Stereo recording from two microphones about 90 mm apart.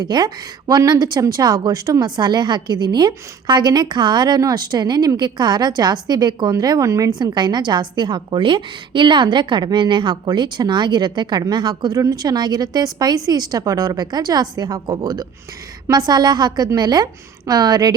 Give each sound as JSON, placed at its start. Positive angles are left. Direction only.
{"t": 0.0, "sound": "speech", "side_deg": -50}
{"t": 7.2, "sound": "a woman's voice", "side_deg": -55}